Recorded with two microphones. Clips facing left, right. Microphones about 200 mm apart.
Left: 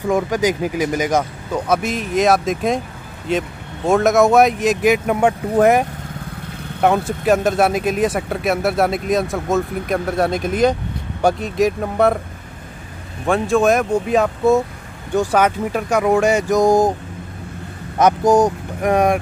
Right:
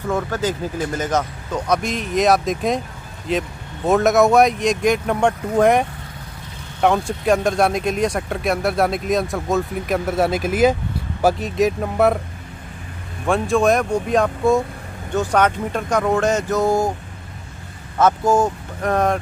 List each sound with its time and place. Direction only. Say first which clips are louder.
0.1 s speech: left 4 dB; 15° left (ahead or behind)
13.3 s speech: left 1 dB; centre (ahead or behind)
17.9 s speech: left 3 dB; 15° left (ahead or behind)